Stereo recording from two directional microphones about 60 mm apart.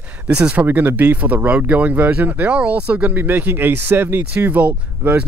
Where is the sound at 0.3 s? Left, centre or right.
Centre.